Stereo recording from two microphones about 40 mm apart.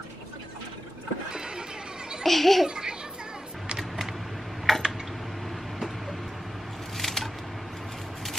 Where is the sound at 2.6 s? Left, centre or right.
Centre.